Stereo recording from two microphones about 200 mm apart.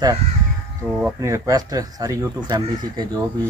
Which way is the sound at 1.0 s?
15° right (ahead or behind).